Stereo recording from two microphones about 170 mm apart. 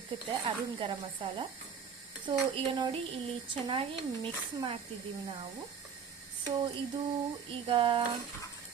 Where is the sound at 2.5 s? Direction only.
30° right (ahead or behind).